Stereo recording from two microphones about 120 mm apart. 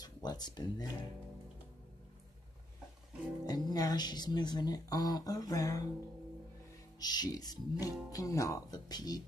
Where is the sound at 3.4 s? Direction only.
30° left (ahead or behind).